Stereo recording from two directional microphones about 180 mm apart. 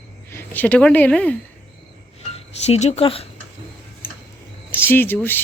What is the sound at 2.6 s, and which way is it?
Speech, 35° left (ahead or behind).